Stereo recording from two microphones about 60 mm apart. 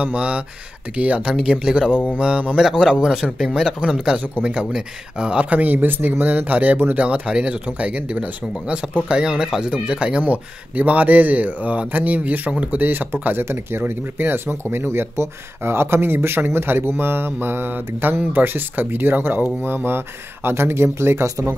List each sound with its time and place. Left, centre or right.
0.0 s a man's voice: right
4.4 s speech: right